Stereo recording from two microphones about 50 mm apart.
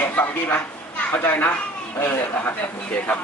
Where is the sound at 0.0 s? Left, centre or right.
Left.